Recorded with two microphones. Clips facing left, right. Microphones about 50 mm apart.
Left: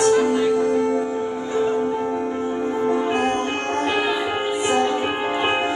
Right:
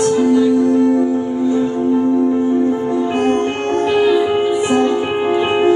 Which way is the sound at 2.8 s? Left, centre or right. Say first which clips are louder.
Right 3 dB; left.